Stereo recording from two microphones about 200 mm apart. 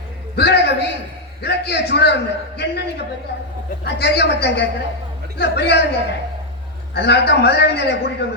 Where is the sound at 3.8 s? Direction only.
55° left (ahead or behind).